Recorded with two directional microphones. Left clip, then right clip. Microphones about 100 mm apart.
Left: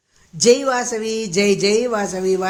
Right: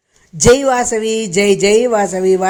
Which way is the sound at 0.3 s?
55° right (ahead or behind).